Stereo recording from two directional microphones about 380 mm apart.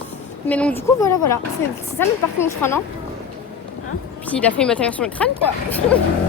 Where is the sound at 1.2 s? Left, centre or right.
Left.